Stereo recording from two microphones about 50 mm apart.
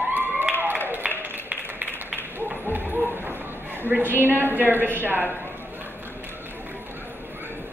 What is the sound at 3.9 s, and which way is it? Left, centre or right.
A woman's voice, right.